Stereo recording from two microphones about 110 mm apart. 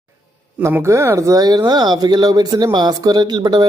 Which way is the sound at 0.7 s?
25° right (ahead or behind).